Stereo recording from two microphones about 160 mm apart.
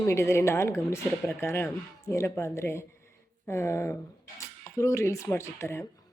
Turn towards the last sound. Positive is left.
turn(degrees=15)  # may be behind; listen again after turning